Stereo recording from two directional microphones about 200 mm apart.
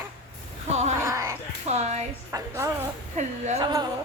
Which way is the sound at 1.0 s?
15° right (ahead or behind).